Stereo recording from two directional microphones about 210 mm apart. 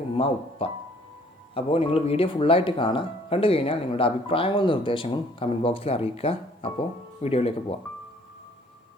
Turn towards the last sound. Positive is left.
turn(degrees=30)  # may be behind; listen again after turning